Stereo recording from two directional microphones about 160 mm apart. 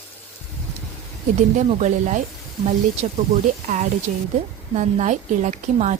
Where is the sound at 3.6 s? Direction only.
50° right (ahead or behind).